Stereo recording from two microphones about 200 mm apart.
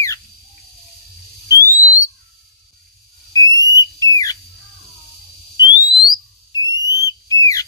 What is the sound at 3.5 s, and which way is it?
Whistle, 15° left (ahead or behind).